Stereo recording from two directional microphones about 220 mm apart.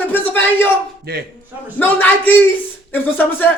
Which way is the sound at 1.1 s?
45° right (ahead or behind).